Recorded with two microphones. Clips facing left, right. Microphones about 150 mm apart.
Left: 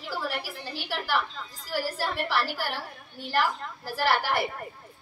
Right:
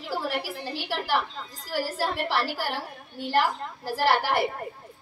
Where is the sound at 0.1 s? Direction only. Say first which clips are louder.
Right 3 dB; 25° right (ahead or behind).